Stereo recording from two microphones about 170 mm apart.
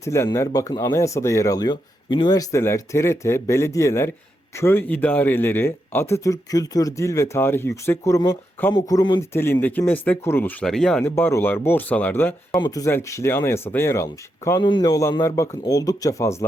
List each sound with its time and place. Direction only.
0.0 s speech: 15° left (ahead or behind)
12.5 s a man's voice: 25° left (ahead or behind)